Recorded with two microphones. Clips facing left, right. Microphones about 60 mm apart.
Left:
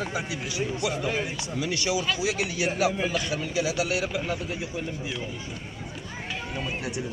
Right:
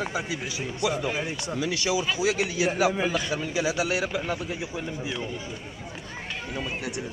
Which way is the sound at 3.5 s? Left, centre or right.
Right.